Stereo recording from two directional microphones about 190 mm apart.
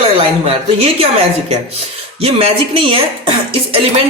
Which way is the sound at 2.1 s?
30° right (ahead or behind).